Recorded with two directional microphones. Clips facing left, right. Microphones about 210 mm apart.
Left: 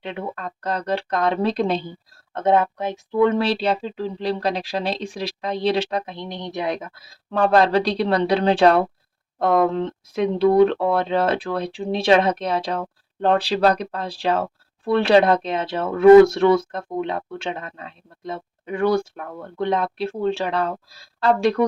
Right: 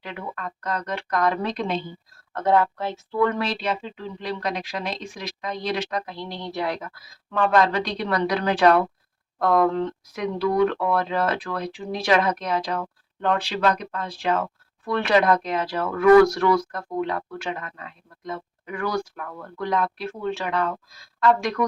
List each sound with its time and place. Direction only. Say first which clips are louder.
0.0 s speech: left 4 dB; 25° left (ahead or behind)
2.3 s speech: left 2 dB; 20° left (ahead or behind)
3.4 s speech: left 5 dB; 30° left (ahead or behind)